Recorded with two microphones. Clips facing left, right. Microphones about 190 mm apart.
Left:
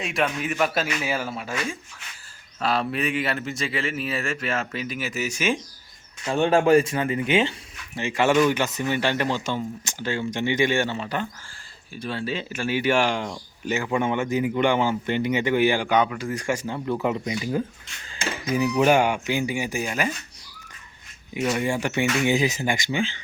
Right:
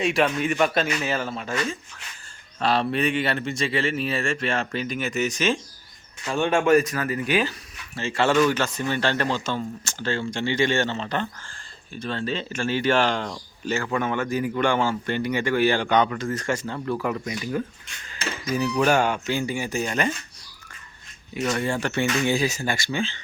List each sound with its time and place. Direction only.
0.0 s a man's voice: centre (ahead or behind)
2.6 s speech: 30° right (ahead or behind)
3.9 s a man's voice: 5° left (ahead or behind)
6.2 s speech: 35° left (ahead or behind); by 20.1 s 10° left (ahead or behind)
21.3 s speech: 10° left (ahead or behind)